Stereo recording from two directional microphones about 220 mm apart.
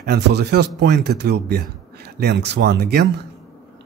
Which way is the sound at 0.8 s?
50° right (ahead or behind).